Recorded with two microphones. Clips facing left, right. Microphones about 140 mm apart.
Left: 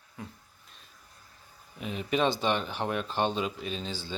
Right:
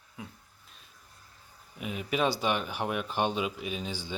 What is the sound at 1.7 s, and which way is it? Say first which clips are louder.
Speech: left 2 dB; 10° right (ahead or behind).